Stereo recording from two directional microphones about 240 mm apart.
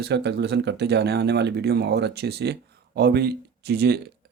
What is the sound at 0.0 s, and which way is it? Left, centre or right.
Speech, right.